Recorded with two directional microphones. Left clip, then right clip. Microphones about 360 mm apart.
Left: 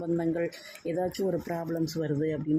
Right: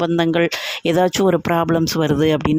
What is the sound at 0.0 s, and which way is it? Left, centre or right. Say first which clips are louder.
Speech: right 12 dB; right.